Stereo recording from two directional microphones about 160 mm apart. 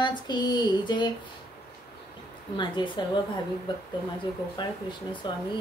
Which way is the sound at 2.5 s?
30° left (ahead or behind).